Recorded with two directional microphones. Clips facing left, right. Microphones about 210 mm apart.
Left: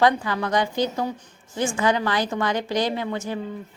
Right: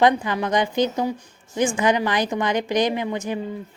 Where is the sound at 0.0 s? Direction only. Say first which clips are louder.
Right 2 dB; 20° right (ahead or behind).